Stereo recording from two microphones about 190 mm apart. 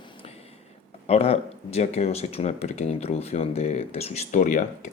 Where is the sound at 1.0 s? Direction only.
30° left (ahead or behind).